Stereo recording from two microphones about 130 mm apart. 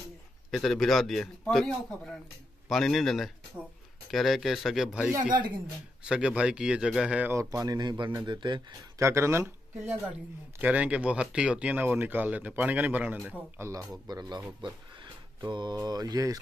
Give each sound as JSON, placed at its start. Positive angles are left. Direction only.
{"t": 0.5, "sound": "a man's voice", "side_deg": 0}
{"t": 2.7, "sound": "a man's voice", "side_deg": 0}
{"t": 7.2, "sound": "a man's voice", "side_deg": -25}
{"t": 9.0, "sound": "speech", "side_deg": -20}
{"t": 14.0, "sound": "a man's voice", "side_deg": -30}
{"t": 15.4, "sound": "a man's voice", "side_deg": -35}